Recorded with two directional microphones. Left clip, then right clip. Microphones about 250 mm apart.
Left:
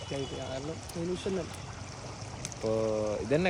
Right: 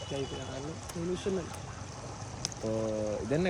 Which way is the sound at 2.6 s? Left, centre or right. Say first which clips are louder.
Left 4 dB; centre.